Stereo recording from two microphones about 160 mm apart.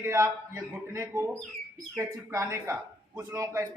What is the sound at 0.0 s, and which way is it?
A man's voice, 15° right (ahead or behind).